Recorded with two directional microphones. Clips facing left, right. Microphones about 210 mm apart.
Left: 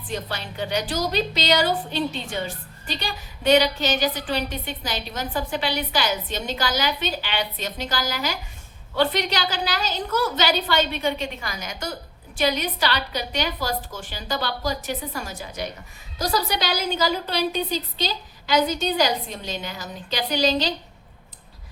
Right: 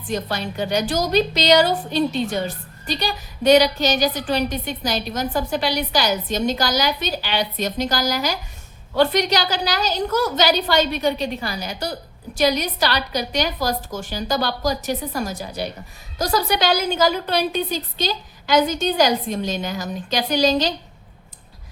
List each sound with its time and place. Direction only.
0.1 s a woman's voice: 40° right (ahead or behind)
16.1 s a woman's voice: 50° right (ahead or behind)